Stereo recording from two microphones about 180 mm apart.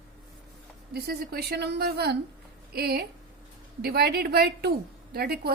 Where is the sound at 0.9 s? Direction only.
60° right (ahead or behind).